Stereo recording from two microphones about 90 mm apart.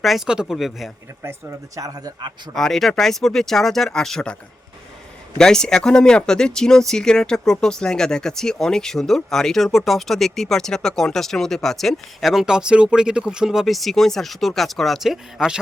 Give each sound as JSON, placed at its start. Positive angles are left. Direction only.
{"t": 0.0, "sound": "speech", "side_deg": 0}
{"t": 1.2, "sound": "speech", "side_deg": -30}
{"t": 1.8, "sound": "speech", "side_deg": -45}
{"t": 2.6, "sound": "speech", "side_deg": 5}
{"t": 5.4, "sound": "speech", "side_deg": 5}